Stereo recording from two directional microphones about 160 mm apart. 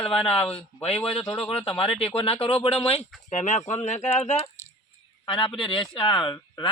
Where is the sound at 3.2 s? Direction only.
50° left (ahead or behind).